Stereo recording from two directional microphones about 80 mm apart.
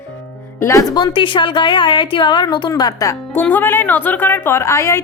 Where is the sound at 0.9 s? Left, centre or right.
Left.